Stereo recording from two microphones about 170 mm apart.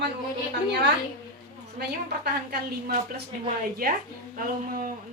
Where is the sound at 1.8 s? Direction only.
70° right (ahead or behind); by 4.9 s 55° right (ahead or behind).